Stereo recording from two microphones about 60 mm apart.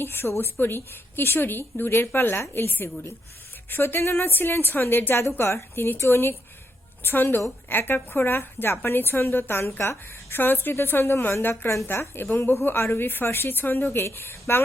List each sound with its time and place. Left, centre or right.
0.0 s a woman's voice: left